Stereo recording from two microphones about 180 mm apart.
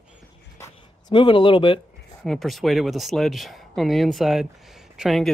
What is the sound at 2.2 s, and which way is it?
Speech, centre (ahead or behind).